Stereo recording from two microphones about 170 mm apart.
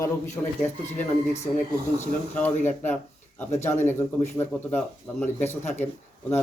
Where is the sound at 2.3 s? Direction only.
10° left (ahead or behind).